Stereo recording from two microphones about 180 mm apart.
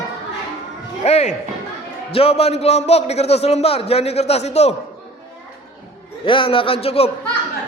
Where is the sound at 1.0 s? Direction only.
35° left (ahead or behind).